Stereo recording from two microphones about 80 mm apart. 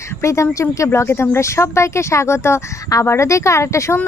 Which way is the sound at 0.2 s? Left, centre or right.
Left.